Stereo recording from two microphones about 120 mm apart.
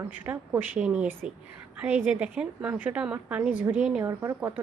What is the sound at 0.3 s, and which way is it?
A woman's voice, 15° right (ahead or behind).